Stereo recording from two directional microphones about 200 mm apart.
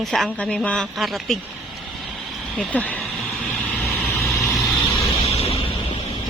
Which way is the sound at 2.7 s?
5° left (ahead or behind).